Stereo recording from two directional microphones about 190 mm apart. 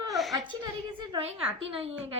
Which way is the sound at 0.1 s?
Centre (ahead or behind).